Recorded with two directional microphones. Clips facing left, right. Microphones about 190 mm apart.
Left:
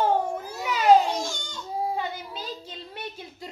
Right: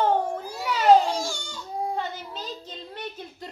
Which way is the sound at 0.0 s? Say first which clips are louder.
Right 1 dB; 10° left (ahead or behind).